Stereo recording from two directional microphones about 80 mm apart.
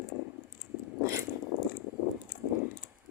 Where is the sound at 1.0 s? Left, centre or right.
Right.